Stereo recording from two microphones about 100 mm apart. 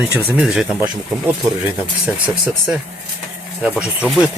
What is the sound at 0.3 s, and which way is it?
Speech, 10° right (ahead or behind).